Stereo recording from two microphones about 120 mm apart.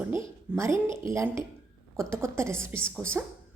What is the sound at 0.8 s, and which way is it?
Speech, 45° left (ahead or behind).